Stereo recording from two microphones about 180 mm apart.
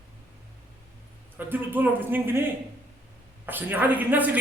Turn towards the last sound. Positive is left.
turn(degrees=-10)  # may be behind; listen again after turning